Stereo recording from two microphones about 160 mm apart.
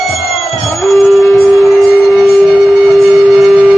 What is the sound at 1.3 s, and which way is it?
Music, centre (ahead or behind).